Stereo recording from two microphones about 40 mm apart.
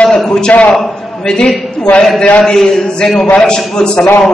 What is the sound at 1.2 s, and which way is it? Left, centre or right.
A man's voice, centre.